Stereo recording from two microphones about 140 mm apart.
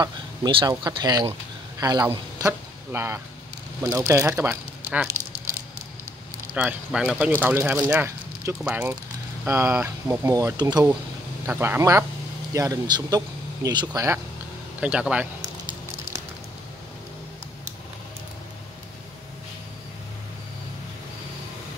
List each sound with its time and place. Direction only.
0.5 s a man's voice: 35° right (ahead or behind); by 5.1 s 10° right (ahead or behind)
6.5 s speech: 5° right (ahead or behind); by 10.9 s 30° right (ahead or behind)
11.4 s speech: 15° right (ahead or behind)
12.5 s speech: 25° right (ahead or behind)
14.8 s speech: 10° right (ahead or behind)